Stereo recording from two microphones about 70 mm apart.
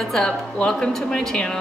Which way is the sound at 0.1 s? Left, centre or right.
Centre.